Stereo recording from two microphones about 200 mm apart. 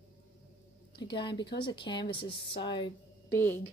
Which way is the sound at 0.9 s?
25° left (ahead or behind).